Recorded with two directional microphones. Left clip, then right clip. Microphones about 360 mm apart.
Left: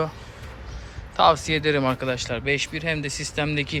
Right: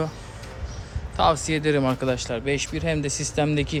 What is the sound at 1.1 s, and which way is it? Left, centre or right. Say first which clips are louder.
Speech: left 3 dB; centre.